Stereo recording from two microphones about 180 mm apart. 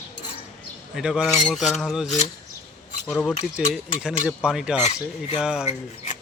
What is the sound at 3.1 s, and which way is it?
Speech, centre (ahead or behind).